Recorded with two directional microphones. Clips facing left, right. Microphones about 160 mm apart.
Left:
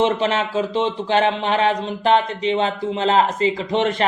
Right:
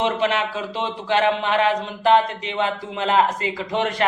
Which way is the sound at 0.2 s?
25° left (ahead or behind).